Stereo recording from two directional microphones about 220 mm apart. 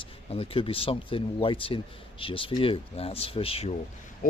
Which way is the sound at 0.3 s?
25° left (ahead or behind).